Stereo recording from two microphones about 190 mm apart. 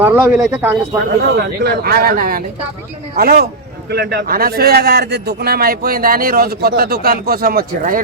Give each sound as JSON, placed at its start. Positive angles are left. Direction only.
{"t": 0.0, "sound": "speech", "side_deg": -10}
{"t": 1.2, "sound": "a man's voice", "side_deg": -60}